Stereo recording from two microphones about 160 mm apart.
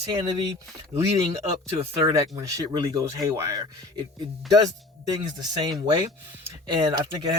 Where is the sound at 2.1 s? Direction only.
20° right (ahead or behind).